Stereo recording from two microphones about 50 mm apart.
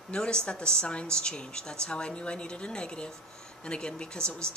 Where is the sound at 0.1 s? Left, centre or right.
Centre.